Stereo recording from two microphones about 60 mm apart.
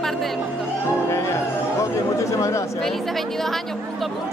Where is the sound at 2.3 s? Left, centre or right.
Left.